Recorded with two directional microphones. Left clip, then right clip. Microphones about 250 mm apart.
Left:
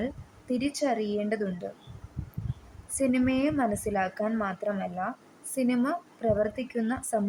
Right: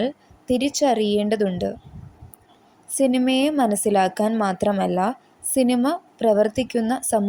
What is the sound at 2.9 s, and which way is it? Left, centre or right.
A woman's voice, centre.